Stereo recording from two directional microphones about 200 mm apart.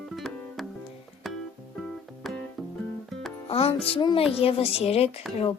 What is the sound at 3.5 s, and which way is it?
A woman's voice, 30° left (ahead or behind).